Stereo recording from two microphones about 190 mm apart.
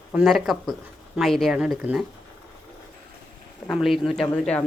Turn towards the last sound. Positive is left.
turn(degrees=5)  # may be behind; listen again after turning